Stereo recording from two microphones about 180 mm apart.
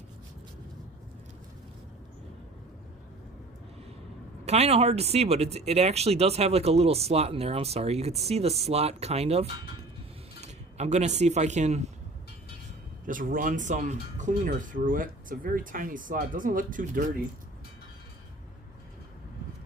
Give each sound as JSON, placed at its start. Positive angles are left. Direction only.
{"t": 4.4, "sound": "speech", "side_deg": -35}
{"t": 13.1, "sound": "speech", "side_deg": -50}